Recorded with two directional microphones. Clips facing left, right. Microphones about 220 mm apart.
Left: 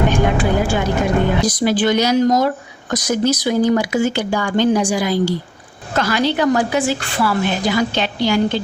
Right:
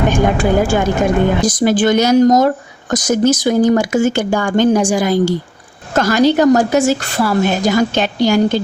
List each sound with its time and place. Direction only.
0.1 s a woman's voice: 45° right (ahead or behind)